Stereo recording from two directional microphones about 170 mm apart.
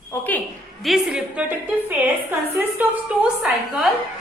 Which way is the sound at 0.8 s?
5° right (ahead or behind).